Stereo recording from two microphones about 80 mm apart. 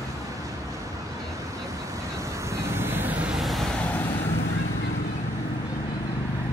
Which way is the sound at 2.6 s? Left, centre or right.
Right.